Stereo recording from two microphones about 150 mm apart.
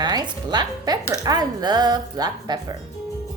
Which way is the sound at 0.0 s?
25° right (ahead or behind).